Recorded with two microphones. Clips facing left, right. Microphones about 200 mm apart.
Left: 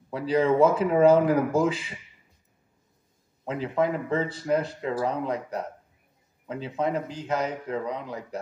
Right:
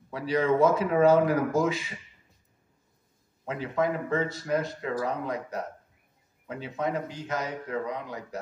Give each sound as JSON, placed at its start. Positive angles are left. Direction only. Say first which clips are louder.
{"t": 0.2, "sound": "speech", "louder": "left 2 dB", "side_deg": 30}
{"t": 3.4, "sound": "speech", "louder": "left 2 dB", "side_deg": 30}
{"t": 6.8, "sound": "speech", "louder": "left 2 dB", "side_deg": 30}